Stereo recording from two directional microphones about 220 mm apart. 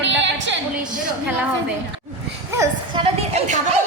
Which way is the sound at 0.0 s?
55° right (ahead or behind).